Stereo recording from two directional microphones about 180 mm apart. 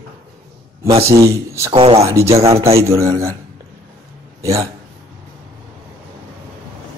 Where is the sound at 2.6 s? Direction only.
15° right (ahead or behind).